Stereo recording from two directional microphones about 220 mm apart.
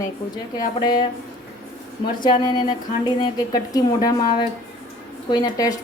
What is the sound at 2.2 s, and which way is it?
A woman's voice, 20° left (ahead or behind).